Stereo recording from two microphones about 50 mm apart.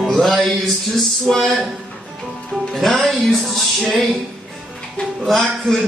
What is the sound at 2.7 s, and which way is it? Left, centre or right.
Speech, centre.